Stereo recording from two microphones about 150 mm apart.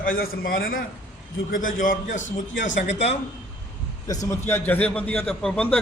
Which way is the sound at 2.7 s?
50° left (ahead or behind).